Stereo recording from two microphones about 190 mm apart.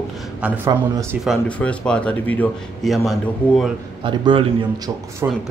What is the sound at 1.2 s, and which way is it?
A man's voice, 5° left (ahead or behind).